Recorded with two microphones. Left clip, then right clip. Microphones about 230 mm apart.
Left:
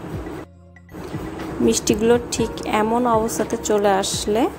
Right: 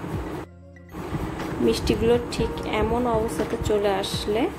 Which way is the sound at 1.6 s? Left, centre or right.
Centre.